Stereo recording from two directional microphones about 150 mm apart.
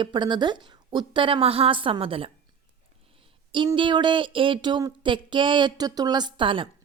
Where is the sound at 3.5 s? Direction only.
35° right (ahead or behind).